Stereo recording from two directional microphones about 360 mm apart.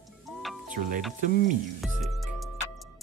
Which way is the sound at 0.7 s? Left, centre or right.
Right.